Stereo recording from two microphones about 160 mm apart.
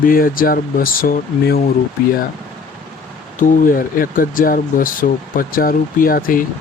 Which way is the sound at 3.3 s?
60° left (ahead or behind).